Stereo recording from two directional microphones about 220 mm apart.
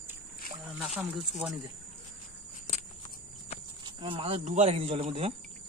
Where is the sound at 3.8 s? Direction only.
25° right (ahead or behind).